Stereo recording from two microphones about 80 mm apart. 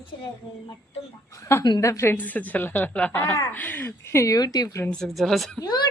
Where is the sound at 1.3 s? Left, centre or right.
Left.